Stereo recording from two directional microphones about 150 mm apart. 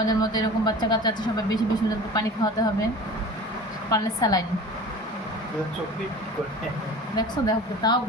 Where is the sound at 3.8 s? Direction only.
25° left (ahead or behind).